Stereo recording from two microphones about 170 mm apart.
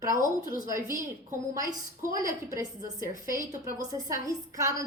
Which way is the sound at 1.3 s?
20° right (ahead or behind).